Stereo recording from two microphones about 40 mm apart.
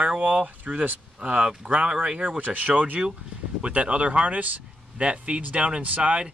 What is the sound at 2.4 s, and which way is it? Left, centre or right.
Speech, right.